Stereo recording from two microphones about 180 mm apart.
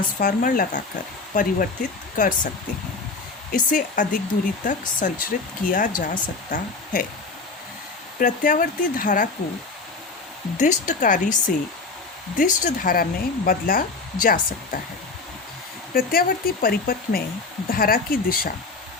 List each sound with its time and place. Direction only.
0.2 s speech: 50° left (ahead or behind)
3.5 s speech: 45° left (ahead or behind)
8.2 s speech: 45° left (ahead or behind)
10.6 s speech: 45° left (ahead or behind)
12.4 s speech: 45° left (ahead or behind)
16.0 s speech: 55° left (ahead or behind)